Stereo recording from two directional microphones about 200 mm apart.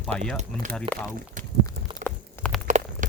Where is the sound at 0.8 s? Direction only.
5° left (ahead or behind).